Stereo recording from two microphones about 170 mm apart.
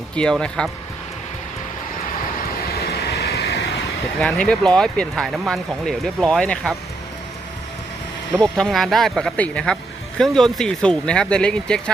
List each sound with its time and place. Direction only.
0.2 s speech: 5° left (ahead or behind)
2.7 s vehicle: 70° left (ahead or behind)
4.2 s speech: 5° left (ahead or behind)
8.3 s speech: centre (ahead or behind)